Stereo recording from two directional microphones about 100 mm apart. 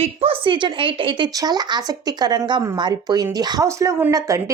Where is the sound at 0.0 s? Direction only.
80° right; by 1.3 s 60° right (ahead or behind).